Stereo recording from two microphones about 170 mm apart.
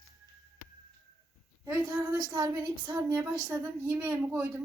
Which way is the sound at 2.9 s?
15° right (ahead or behind).